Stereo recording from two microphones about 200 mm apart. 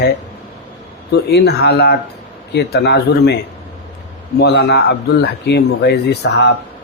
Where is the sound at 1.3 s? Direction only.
55° left (ahead or behind).